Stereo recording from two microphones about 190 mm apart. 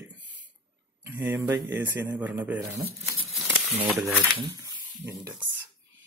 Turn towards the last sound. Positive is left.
turn(degrees=-15)  # may be behind; listen again after turning